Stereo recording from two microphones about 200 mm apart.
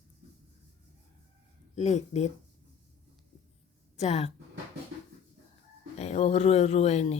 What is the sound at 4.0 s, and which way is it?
Speech, 35° left (ahead or behind).